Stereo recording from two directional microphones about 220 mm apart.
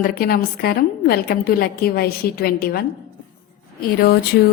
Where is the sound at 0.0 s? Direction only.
45° left (ahead or behind).